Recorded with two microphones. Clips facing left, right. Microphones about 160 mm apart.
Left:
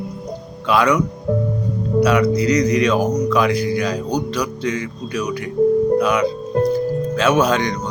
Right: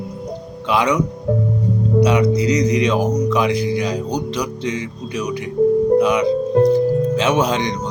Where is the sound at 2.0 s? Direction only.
20° right (ahead or behind).